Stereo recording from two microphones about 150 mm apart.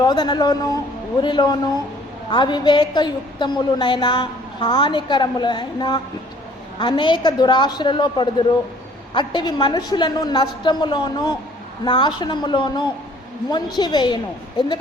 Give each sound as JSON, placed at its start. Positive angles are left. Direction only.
{"t": 0.0, "sound": "a woman's voice", "side_deg": 30}